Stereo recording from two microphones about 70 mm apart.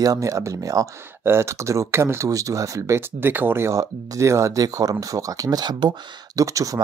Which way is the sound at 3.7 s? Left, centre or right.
Right.